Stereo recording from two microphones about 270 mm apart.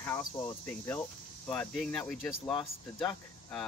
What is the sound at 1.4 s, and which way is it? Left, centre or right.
Speech, centre.